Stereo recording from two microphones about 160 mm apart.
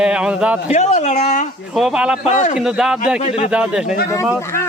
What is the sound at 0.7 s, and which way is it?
Speech, 45° left (ahead or behind).